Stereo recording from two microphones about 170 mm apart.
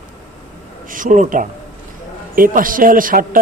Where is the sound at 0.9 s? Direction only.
50° right (ahead or behind).